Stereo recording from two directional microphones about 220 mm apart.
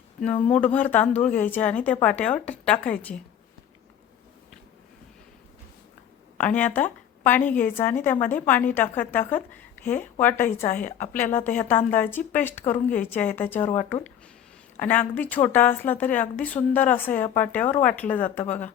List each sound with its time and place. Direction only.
0.5 s speech: 5° left (ahead or behind)
6.3 s a woman's voice: 5° left (ahead or behind)
10.7 s a woman's voice: 35° left (ahead or behind)
11.2 s speech: 10° left (ahead or behind)
14.8 s speech: 5° left (ahead or behind)